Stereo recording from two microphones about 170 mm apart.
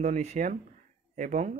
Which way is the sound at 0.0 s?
45° right (ahead or behind).